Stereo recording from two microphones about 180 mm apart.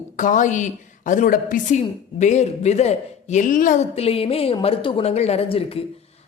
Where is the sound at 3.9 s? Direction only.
35° left (ahead or behind).